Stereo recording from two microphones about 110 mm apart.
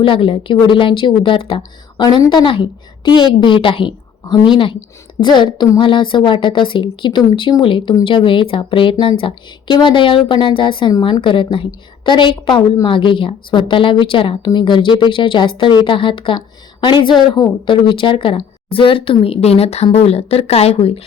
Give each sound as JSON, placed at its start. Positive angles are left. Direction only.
{"t": 0.0, "sound": "a woman's voice", "side_deg": 50}